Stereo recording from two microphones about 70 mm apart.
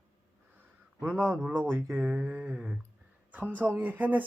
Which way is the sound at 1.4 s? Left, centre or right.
Right.